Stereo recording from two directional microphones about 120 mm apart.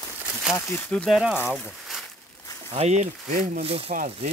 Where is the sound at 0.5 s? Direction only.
20° left (ahead or behind).